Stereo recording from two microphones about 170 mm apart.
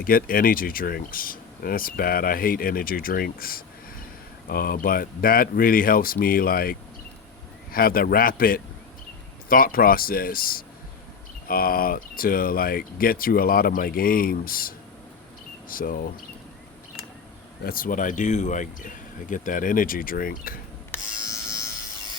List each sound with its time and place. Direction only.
0.0 s speech: 55° left (ahead or behind)
15.7 s speech: 55° left (ahead or behind)
17.6 s speech: 60° left (ahead or behind)
20.9 s electric shaver: 10° left (ahead or behind)